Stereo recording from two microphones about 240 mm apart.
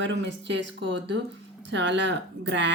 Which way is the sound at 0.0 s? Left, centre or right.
Right.